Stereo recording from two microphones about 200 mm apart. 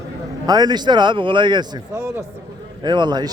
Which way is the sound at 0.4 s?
20° right (ahead or behind).